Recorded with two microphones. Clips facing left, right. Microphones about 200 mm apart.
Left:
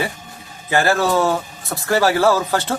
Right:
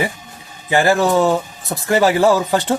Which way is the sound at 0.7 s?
15° right (ahead or behind).